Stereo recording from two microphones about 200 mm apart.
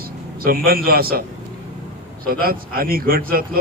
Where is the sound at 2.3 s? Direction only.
45° right (ahead or behind).